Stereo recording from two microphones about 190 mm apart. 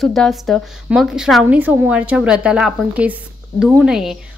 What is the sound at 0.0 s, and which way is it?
A woman's voice, centre (ahead or behind).